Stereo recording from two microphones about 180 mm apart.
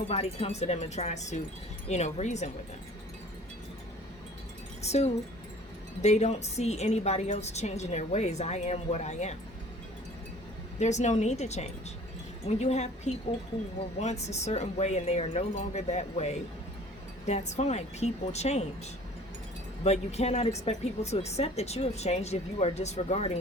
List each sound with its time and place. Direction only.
0.1 s a woman's voice: 35° left (ahead or behind)
4.8 s a woman's voice: 35° left (ahead or behind)
10.8 s a woman's voice: 40° left (ahead or behind)
19.8 s a woman's voice: 35° left (ahead or behind)